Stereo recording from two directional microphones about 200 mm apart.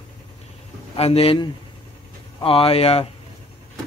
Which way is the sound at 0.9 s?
30° left (ahead or behind).